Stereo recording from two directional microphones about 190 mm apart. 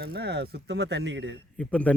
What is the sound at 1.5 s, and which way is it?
Speech, 5° left (ahead or behind).